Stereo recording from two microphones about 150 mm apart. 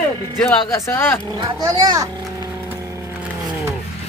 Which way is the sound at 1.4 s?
25° right (ahead or behind).